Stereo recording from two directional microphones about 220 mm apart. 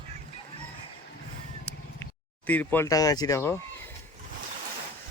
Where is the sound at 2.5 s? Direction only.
10° left (ahead or behind).